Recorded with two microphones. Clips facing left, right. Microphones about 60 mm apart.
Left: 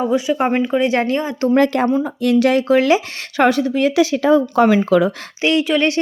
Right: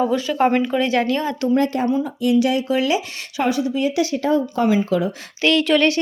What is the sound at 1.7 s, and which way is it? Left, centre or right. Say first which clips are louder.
Speech: left 4 dB; left.